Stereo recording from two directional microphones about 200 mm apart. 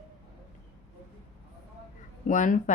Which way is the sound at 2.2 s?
40° left (ahead or behind).